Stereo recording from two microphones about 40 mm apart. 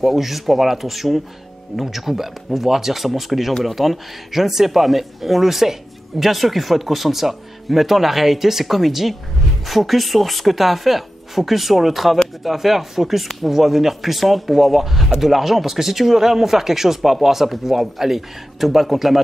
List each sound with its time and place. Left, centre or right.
0.0 s speech: centre